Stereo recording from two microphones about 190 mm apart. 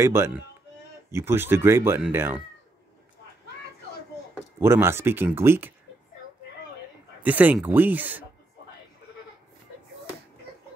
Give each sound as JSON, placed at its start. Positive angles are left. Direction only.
{"t": 0.0, "sound": "speech", "side_deg": -15}
{"t": 4.6, "sound": "speech", "side_deg": -15}
{"t": 7.2, "sound": "speech", "side_deg": -10}